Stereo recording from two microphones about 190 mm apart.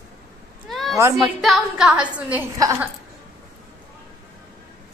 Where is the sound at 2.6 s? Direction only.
15° right (ahead or behind).